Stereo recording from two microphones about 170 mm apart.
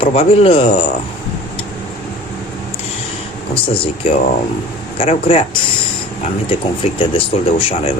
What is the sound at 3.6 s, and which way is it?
Speech, 30° left (ahead or behind).